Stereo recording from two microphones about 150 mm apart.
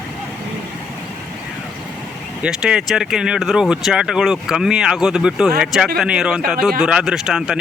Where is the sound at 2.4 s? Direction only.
5° right (ahead or behind).